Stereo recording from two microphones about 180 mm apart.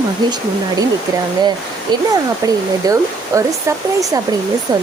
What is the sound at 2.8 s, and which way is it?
Speech, 20° right (ahead or behind).